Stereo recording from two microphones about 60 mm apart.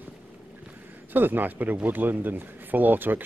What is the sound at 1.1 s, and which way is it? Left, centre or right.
Speech, right.